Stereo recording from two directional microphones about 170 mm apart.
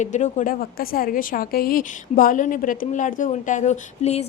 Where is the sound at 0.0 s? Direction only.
45° left (ahead or behind).